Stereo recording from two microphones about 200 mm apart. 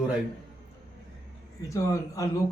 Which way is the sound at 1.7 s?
15° left (ahead or behind).